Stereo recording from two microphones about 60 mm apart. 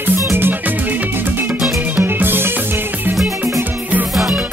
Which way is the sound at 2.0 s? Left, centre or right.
Right.